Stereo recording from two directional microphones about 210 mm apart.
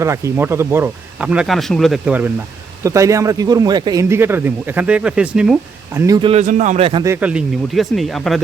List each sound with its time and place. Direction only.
0.0 s speech: 10° right (ahead or behind)
6.4 s a man's voice: 35° right (ahead or behind)
7.0 s speech: 10° right (ahead or behind)